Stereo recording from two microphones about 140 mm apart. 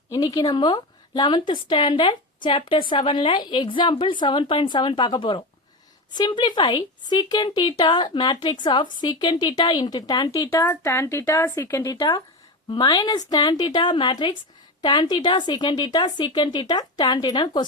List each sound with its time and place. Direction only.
0.1 s a woman's voice: 30° left (ahead or behind)
10.6 s a woman's voice: 15° left (ahead or behind); by 17.7 s 30° left (ahead or behind)